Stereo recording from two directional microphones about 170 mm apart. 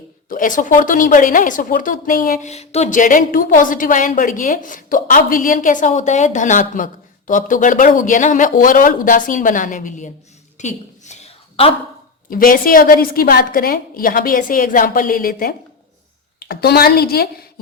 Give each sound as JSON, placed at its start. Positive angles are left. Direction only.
{"t": 0.3, "sound": "a woman's voice", "side_deg": 50}
{"t": 10.6, "sound": "a sound", "side_deg": 45}
{"t": 12.3, "sound": "a woman's voice", "side_deg": 55}